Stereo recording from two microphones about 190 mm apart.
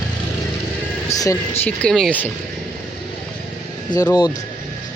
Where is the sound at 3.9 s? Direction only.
20° left (ahead or behind).